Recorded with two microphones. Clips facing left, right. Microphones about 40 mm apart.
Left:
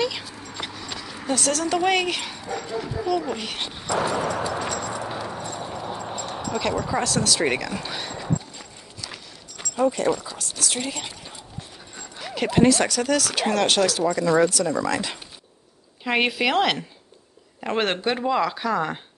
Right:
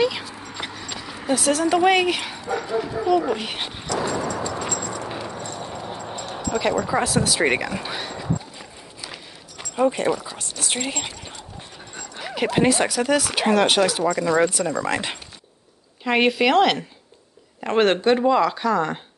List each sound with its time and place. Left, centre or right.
0.0 s speech: centre
4.3 s a sound: centre
4.6 s keys jangling: centre
7.0 s speech: centre
9.8 s speech: right
10.0 s speech: centre
10.6 s a sound: right
12.2 s speech: centre
14.9 s speech: right
16.0 s speech: centre